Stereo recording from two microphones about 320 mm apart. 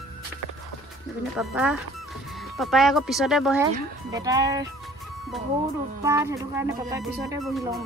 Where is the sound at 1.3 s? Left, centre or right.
Centre.